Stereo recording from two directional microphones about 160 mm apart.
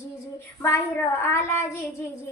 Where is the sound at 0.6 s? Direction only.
15° left (ahead or behind).